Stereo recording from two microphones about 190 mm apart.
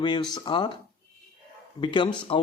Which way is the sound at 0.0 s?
20° left (ahead or behind).